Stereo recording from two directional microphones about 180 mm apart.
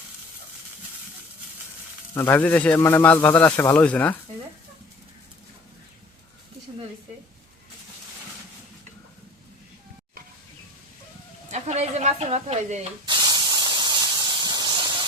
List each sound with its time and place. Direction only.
2.1 s a man's voice: 10° left (ahead or behind)
11.5 s a sound: 40° right (ahead or behind)
13.1 s spray: 20° right (ahead or behind)